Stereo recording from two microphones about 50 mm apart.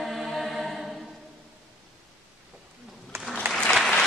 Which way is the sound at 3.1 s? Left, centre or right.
Right.